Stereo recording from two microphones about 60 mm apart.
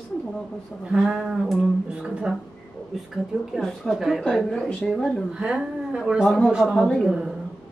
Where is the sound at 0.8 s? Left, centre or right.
Centre.